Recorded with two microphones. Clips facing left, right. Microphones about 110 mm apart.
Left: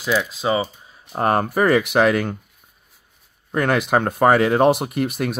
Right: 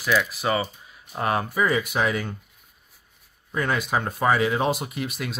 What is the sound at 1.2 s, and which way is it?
Speech, 50° left (ahead or behind).